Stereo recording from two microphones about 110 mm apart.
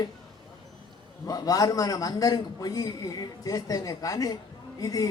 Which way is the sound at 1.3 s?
35° left (ahead or behind).